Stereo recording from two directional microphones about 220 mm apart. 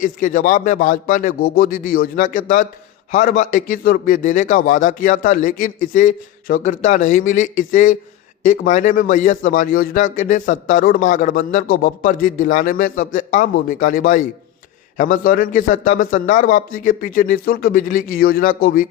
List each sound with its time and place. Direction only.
0.0 s a man's voice: 35° left (ahead or behind)